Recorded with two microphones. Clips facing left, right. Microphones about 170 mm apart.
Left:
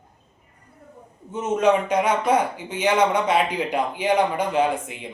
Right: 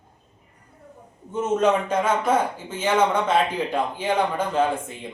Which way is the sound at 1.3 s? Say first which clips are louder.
Left 1 dB; 10° left (ahead or behind).